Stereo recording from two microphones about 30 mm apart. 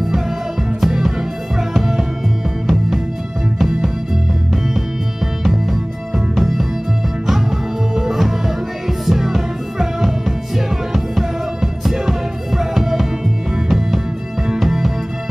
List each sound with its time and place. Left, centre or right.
0.1 s music: centre
7.9 s music: centre